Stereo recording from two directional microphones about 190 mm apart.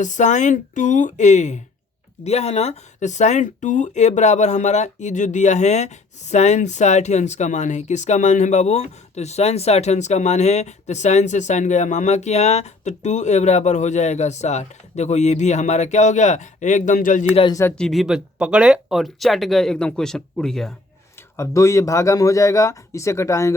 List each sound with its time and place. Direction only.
0.0 s speech: 40° left (ahead or behind)
17.3 s speech: 25° left (ahead or behind)
17.6 s speech: 10° left (ahead or behind)
21.3 s speech: 15° left (ahead or behind)